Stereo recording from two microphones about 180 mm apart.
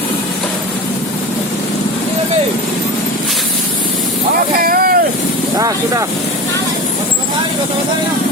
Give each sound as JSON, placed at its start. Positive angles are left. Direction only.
{"t": 4.6, "sound": "boat", "side_deg": -55}
{"t": 5.5, "sound": "speech", "side_deg": -20}